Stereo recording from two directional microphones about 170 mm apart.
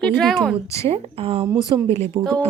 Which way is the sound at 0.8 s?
35° right (ahead or behind).